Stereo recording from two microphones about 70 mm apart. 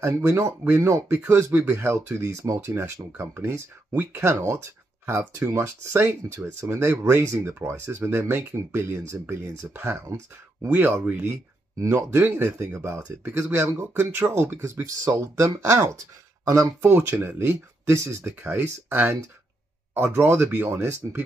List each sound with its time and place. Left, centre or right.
0.0 s speech: right
11.8 s speech: right
12.2 s speech: right
16.8 s speech: right